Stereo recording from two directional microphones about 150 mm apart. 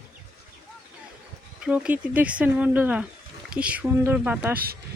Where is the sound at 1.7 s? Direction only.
10° right (ahead or behind).